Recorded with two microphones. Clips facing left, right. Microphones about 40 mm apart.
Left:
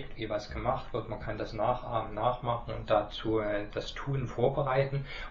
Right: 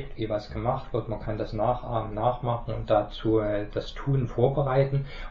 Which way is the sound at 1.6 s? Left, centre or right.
Centre.